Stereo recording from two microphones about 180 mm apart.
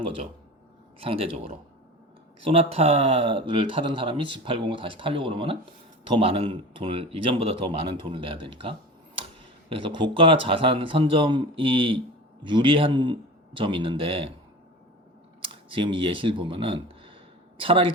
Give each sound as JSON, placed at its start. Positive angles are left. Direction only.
{"t": 0.9, "sound": "speech", "side_deg": -30}
{"t": 15.4, "sound": "speech", "side_deg": -30}